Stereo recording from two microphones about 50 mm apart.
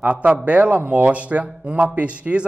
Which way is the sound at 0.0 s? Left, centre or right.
Right.